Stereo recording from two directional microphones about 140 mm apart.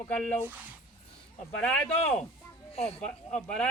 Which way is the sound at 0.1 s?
10° left (ahead or behind).